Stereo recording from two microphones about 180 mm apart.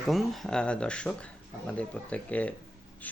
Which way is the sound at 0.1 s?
Centre (ahead or behind).